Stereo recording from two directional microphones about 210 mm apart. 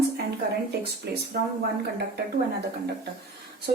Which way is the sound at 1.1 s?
50° right (ahead or behind).